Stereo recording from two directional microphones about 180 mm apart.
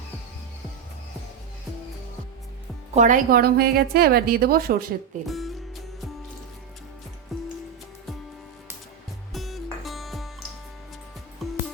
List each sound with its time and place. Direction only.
2.9 s a woman's voice: 45° right (ahead or behind)
5.2 s music: centre (ahead or behind)
7.3 s music: centre (ahead or behind)
9.3 s music: centre (ahead or behind)
11.4 s music: centre (ahead or behind)